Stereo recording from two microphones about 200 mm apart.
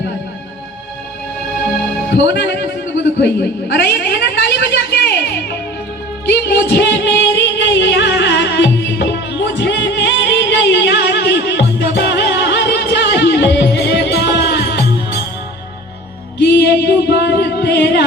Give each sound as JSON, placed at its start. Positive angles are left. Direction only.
{"t": 2.1, "sound": "a sound", "side_deg": 55}
{"t": 6.5, "sound": "music", "side_deg": 60}
{"t": 16.6, "sound": "music", "side_deg": 55}